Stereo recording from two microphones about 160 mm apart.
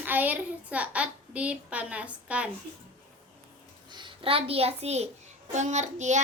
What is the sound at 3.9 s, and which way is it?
A child's voice, 30° right (ahead or behind).